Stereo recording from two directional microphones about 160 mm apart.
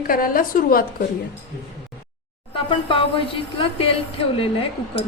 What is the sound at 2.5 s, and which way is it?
A woman's voice, 35° left (ahead or behind).